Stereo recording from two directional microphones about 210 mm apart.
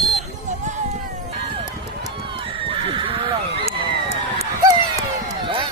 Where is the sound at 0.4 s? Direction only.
35° right (ahead or behind).